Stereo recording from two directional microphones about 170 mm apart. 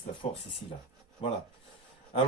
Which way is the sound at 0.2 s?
35° left (ahead or behind).